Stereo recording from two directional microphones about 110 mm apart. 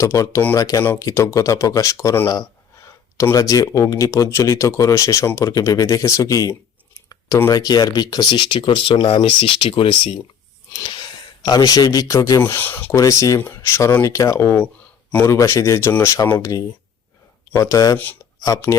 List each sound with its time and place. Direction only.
0.0 s speech: 30° left (ahead or behind)
3.2 s speech: 30° left (ahead or behind)
7.5 s speech: 35° left (ahead or behind)
10.7 s speech: 40° left (ahead or behind)
12.5 s speech: 20° left (ahead or behind)
15.9 s speech: 15° left (ahead or behind)
16.3 s speech: 30° left (ahead or behind)
17.9 s speech: 15° left (ahead or behind)
18.4 s speech: 30° left (ahead or behind)